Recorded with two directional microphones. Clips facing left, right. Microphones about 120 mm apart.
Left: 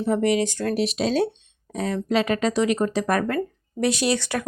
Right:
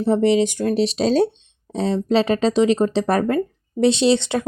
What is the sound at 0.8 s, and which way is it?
Speech, 30° right (ahead or behind).